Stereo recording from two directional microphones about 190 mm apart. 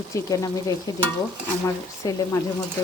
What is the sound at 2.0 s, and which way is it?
Speech, 20° left (ahead or behind).